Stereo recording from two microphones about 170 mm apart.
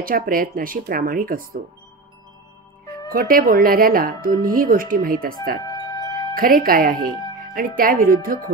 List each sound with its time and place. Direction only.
0.0 s speech: 55° right (ahead or behind)
3.1 s speech: 55° right (ahead or behind)
5.6 s music: 25° left (ahead or behind)
6.3 s speech: 60° right (ahead or behind)